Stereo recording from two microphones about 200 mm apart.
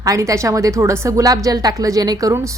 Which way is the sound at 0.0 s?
15° right (ahead or behind).